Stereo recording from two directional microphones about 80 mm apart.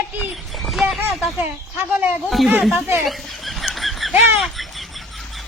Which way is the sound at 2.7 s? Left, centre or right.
Right.